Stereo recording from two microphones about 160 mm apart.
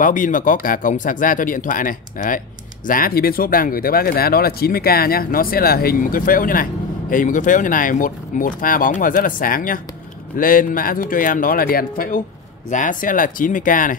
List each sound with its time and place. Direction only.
0.0 s speech: 55° left (ahead or behind)
12.6 s speech: 55° left (ahead or behind)